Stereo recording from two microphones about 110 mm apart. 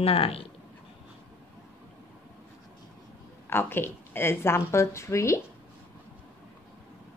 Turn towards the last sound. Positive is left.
turn(degrees=25)  # may be behind; listen again after turning